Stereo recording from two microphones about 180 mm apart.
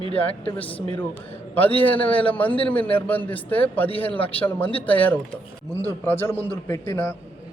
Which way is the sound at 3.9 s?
30° left (ahead or behind).